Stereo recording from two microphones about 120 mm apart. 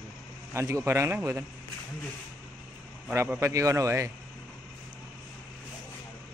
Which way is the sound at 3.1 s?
20° right (ahead or behind).